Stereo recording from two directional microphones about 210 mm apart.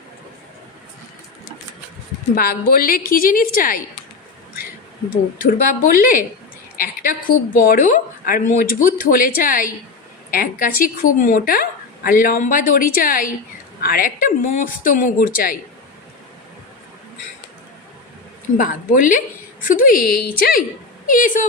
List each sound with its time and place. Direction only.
2.3 s a woman's voice: 45° left (ahead or behind)
5.4 s a woman's voice: 40° left (ahead or behind)
18.5 s a woman's voice: 40° left (ahead or behind)